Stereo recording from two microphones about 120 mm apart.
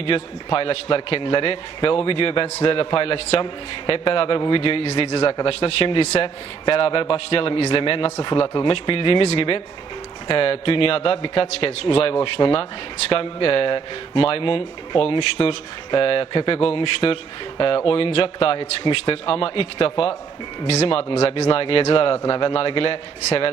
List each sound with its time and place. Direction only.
0.0 s speech: 50° left (ahead or behind)